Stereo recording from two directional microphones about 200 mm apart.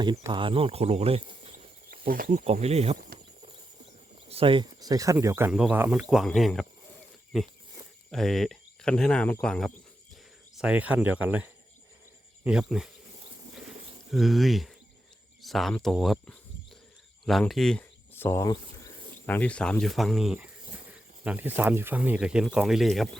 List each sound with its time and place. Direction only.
0.2 s speech: 25° right (ahead or behind)
1.9 s speech: 45° right (ahead or behind)
2.4 s speech: 30° right (ahead or behind)
4.3 s speech: 25° right (ahead or behind); by 6.7 s centre (ahead or behind)
8.1 s speech: centre (ahead or behind)
12.5 s speech: 5° right (ahead or behind)
14.1 s speech: centre (ahead or behind)